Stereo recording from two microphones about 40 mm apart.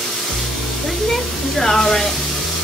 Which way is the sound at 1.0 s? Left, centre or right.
Centre.